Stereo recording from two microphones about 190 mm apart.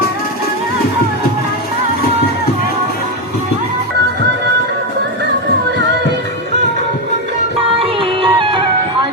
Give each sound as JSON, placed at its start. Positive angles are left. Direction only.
{"t": 7.8, "sound": "music", "side_deg": -30}